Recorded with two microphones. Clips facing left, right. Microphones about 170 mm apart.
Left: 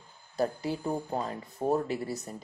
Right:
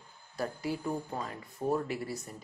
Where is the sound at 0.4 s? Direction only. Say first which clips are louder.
Left 4 dB; 25° left (ahead or behind).